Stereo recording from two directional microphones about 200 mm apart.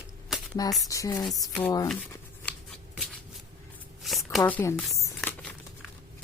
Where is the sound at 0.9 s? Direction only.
15° left (ahead or behind).